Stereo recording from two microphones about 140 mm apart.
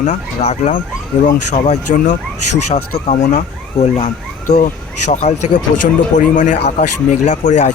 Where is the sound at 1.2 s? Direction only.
60° left (ahead or behind).